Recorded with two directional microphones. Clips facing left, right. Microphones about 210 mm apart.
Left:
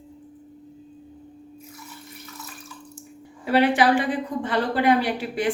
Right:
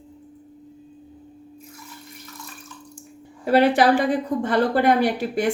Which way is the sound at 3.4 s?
40° right (ahead or behind).